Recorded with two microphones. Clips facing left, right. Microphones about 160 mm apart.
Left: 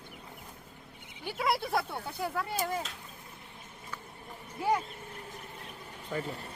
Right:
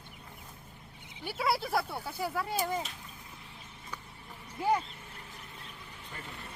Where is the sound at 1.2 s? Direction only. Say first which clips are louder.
Even; 5° right (ahead or behind).